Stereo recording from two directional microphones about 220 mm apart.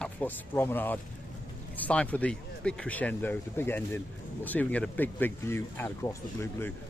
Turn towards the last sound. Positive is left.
turn(degrees=10)  # may be behind; listen again after turning